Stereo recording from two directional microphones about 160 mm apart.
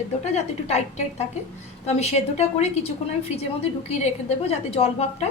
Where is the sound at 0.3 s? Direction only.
45° left (ahead or behind).